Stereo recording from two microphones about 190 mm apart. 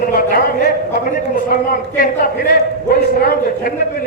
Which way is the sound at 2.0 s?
50° left (ahead or behind).